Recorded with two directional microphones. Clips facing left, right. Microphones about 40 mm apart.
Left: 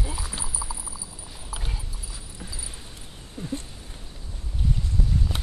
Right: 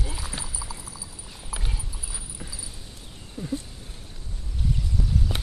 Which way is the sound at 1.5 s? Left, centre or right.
Centre.